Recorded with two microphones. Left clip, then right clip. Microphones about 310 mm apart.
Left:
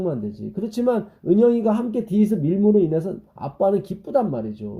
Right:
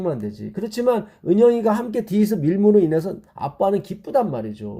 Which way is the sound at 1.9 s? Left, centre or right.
Right.